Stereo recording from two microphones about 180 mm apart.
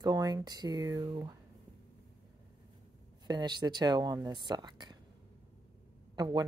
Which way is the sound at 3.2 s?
25° right (ahead or behind).